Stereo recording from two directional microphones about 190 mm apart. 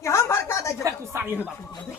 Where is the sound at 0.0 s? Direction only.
15° left (ahead or behind).